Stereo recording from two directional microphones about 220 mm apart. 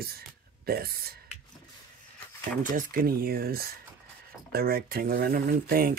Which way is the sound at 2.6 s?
40° right (ahead or behind).